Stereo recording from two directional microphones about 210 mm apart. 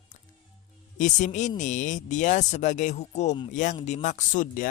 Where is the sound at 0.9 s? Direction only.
35° left (ahead or behind).